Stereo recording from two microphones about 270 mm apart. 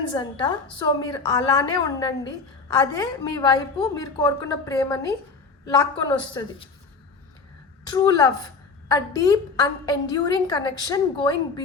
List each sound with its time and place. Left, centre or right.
0.1 s a woman's voice: centre
7.9 s a woman's voice: centre